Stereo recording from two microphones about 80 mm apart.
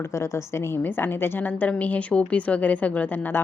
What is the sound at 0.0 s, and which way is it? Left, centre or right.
A woman's voice, left.